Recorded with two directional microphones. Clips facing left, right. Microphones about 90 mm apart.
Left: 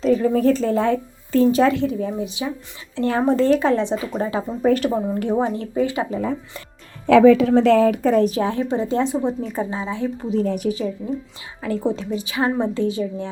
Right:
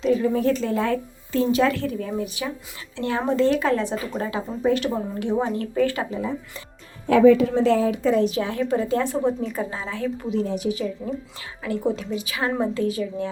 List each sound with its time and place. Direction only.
0.0 s speech: 40° left (ahead or behind)
1.7 s a woman's voice: 20° left (ahead or behind)
2.9 s speech: 35° left (ahead or behind)
4.6 s speech: 45° left (ahead or behind)
5.5 s a woman's voice: 20° left (ahead or behind)
6.1 s speech: 50° left (ahead or behind)
7.1 s a woman's voice: 90° left; by 8.4 s 50° left (ahead or behind)
8.4 s a woman's voice: 30° left (ahead or behind)
9.4 s speech: 35° left (ahead or behind)
9.6 s a woman's voice: 20° left (ahead or behind)
10.2 s speech: 35° left (ahead or behind)
10.4 s speech: 55° left (ahead or behind)
10.7 s a woman's voice: 40° left (ahead or behind)